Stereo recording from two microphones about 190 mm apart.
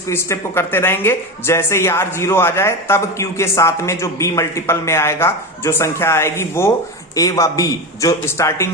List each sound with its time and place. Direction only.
0.1 s speech: 15° left (ahead or behind)